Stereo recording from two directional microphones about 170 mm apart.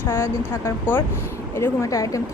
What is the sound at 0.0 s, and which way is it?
A woman's voice, 15° left (ahead or behind).